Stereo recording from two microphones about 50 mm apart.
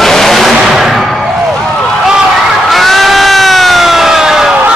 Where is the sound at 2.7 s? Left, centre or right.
Centre.